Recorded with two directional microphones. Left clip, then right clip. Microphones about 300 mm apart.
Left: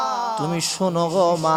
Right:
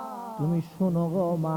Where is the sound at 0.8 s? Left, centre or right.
Centre.